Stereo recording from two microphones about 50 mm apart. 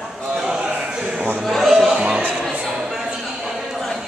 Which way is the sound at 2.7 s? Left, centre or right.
Centre.